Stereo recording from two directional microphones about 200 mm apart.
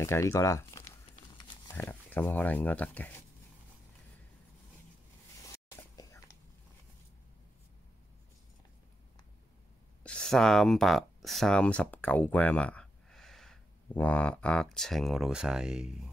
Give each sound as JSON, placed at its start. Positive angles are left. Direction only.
{"t": 0.0, "sound": "speech", "side_deg": 15}
{"t": 5.7, "sound": "whispering", "side_deg": 15}
{"t": 10.0, "sound": "speech", "side_deg": 5}